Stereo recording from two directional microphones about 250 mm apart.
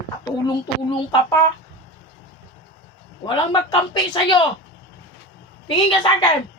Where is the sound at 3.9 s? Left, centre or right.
Centre.